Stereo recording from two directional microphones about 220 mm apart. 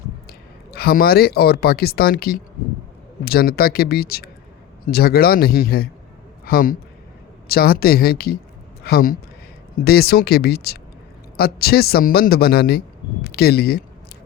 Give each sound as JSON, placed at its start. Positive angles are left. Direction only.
{"t": 0.7, "sound": "a man's voice", "side_deg": 45}